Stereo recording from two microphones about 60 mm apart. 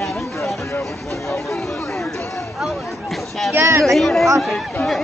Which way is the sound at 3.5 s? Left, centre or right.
Right.